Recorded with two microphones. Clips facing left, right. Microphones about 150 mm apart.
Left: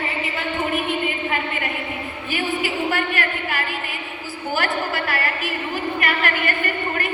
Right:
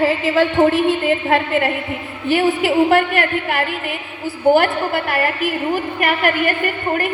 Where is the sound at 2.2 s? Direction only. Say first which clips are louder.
Right 9 dB; 75° right (ahead or behind).